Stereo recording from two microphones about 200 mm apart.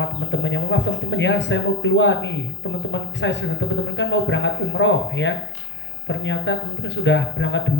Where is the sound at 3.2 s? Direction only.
70° left (ahead or behind).